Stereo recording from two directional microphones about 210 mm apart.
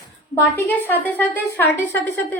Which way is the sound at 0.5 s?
10° left (ahead or behind).